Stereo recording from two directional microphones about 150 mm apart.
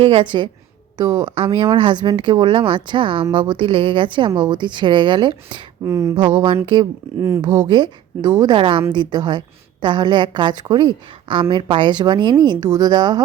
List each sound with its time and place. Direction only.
0.0 s speech: 35° right (ahead or behind)
5.8 s a woman's voice: 20° right (ahead or behind)
6.1 s speech: 30° right (ahead or behind)
7.2 s a woman's voice: 20° right (ahead or behind)
7.4 s speech: 55° right (ahead or behind)
7.7 s a woman's voice: 30° right (ahead or behind)